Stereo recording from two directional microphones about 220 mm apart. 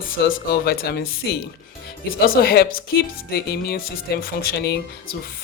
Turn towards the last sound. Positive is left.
turn(degrees=50)  # may be behind; listen again after turning